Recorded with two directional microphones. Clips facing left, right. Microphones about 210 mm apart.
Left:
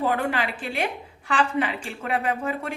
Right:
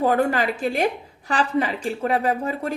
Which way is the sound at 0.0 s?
45° right (ahead or behind).